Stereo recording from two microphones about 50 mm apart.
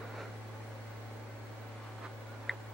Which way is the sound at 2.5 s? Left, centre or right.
Centre.